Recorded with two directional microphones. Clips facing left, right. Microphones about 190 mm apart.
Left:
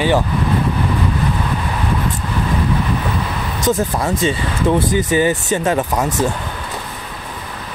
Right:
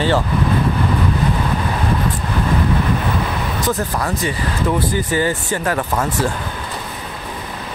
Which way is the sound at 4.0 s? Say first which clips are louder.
Left 3 dB; 25° left (ahead or behind).